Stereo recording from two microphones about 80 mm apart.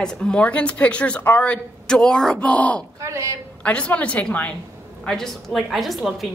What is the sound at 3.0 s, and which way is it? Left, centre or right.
Speech, right.